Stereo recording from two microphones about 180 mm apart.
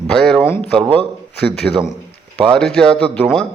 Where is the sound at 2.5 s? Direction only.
5° left (ahead or behind).